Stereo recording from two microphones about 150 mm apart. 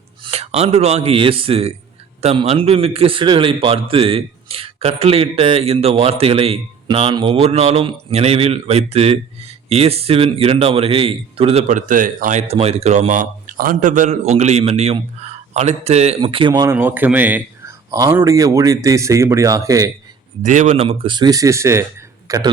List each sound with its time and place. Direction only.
0.3 s a man's voice: 45° right (ahead or behind)
11.7 s a man's voice: 60° right (ahead or behind); by 16.1 s 45° right (ahead or behind)
16.2 s a man's voice: 35° right (ahead or behind)
16.6 s speech: 15° right (ahead or behind)
20.4 s a man's voice: 55° right (ahead or behind); by 22.4 s 20° right (ahead or behind)